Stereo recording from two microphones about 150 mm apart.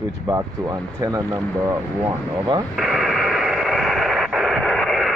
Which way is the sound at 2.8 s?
Centre (ahead or behind).